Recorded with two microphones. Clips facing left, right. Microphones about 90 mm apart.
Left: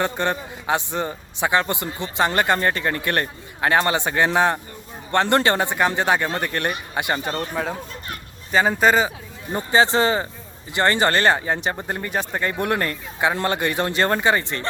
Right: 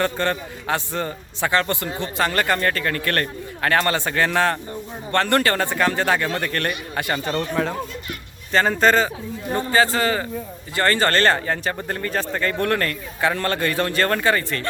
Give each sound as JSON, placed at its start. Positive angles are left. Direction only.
{"t": 0.0, "sound": "a man's voice", "side_deg": 15}
{"t": 7.5, "sound": "a man's voice", "side_deg": 5}